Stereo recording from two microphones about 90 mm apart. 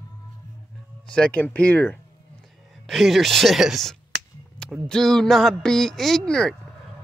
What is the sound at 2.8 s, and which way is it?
Speech, centre (ahead or behind).